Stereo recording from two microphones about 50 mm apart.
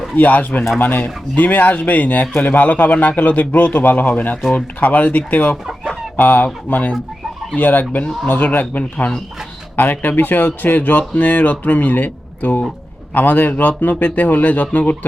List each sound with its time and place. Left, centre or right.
0.2 s speech: left